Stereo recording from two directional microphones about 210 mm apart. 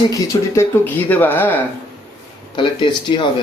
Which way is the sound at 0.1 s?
15° left (ahead or behind).